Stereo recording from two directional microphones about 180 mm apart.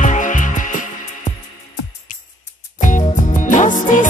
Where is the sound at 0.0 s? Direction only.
45° left (ahead or behind).